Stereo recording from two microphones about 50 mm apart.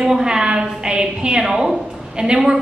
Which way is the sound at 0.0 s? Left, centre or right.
Centre.